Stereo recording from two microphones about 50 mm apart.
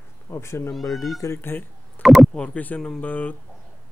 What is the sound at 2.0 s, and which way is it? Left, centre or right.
Speech, centre.